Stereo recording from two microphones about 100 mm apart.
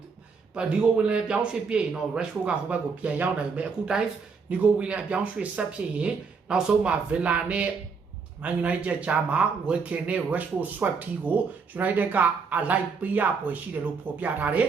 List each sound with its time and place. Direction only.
0.5 s speech: 10° right (ahead or behind)